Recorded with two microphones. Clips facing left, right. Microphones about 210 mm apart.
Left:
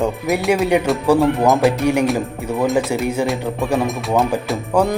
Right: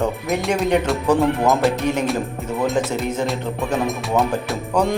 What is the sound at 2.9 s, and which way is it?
Speech, 10° left (ahead or behind).